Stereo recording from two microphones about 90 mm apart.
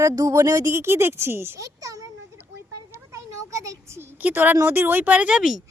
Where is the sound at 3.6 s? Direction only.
35° right (ahead or behind).